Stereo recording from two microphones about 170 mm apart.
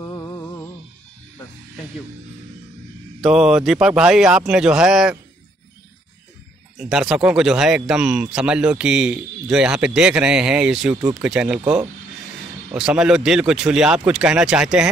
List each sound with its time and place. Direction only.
0.0 s music: 15° left (ahead or behind)
3.2 s speech: 5° right (ahead or behind)
6.8 s speech: 5° right (ahead or behind)